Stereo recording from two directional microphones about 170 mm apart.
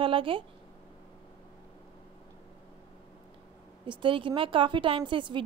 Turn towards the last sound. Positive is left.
turn(degrees=-30)  # may be behind; listen again after turning